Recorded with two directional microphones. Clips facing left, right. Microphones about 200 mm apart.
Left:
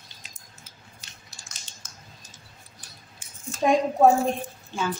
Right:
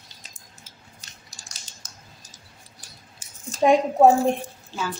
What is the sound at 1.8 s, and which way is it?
Typing, 40° right (ahead or behind).